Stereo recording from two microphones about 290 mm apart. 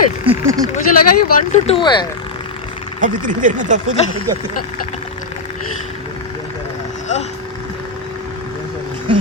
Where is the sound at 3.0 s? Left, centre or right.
Right.